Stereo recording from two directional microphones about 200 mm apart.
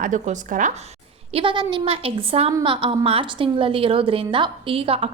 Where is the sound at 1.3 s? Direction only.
25° right (ahead or behind).